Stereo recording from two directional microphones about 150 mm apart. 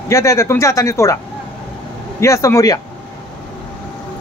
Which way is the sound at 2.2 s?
20° left (ahead or behind).